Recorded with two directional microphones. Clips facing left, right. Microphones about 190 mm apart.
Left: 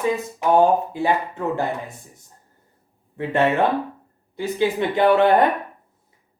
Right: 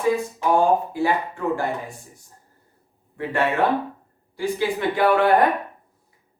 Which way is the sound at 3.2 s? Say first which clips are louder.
Left 3 dB; 20° left (ahead or behind).